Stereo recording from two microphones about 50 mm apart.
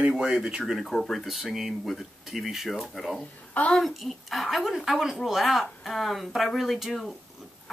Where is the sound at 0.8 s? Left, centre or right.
Centre.